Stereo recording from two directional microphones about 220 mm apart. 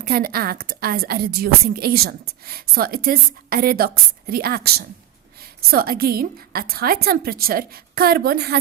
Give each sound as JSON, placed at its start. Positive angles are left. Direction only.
{"t": 0.0, "sound": "a woman's voice", "side_deg": -45}
{"t": 5.7, "sound": "a woman's voice", "side_deg": -45}